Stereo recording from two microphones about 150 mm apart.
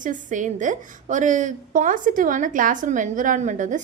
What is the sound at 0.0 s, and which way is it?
A woman's voice, 55° right (ahead or behind).